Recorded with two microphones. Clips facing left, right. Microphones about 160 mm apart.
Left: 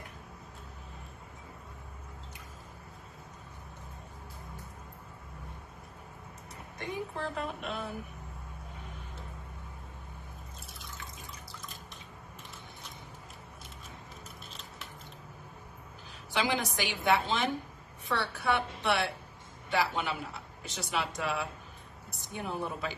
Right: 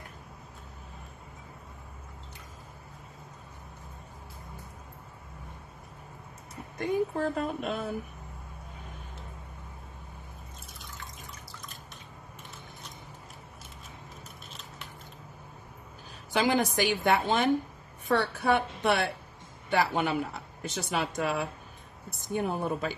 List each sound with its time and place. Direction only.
7.2 s speech: 40° right (ahead or behind)
16.3 s speech: 45° right (ahead or behind)